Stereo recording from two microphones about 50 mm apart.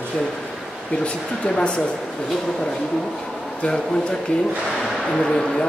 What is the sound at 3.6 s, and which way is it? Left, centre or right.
Speech, centre.